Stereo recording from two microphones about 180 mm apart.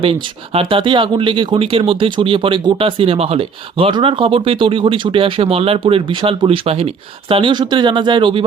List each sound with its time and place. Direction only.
0.0 s speech: 30° right (ahead or behind)